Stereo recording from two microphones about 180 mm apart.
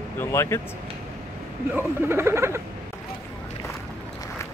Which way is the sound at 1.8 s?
15° right (ahead or behind).